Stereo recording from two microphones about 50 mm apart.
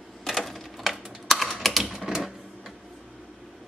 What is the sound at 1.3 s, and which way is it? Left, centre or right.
Typing, centre.